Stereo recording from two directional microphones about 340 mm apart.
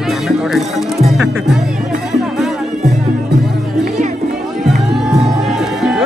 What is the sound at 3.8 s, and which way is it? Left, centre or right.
Music, right.